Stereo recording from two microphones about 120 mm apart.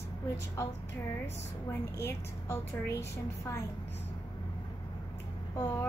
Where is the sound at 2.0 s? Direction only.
20° left (ahead or behind).